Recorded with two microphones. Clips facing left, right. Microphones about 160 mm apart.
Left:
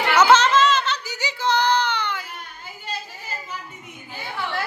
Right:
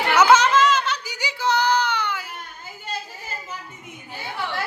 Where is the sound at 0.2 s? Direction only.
10° right (ahead or behind).